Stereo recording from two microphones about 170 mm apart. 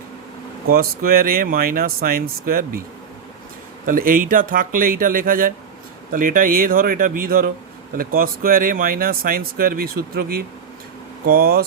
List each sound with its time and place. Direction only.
0.7 s speech: 60° right (ahead or behind)
3.8 s speech: 55° right (ahead or behind)